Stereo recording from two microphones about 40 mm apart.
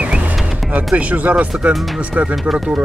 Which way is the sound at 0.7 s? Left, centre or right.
Right.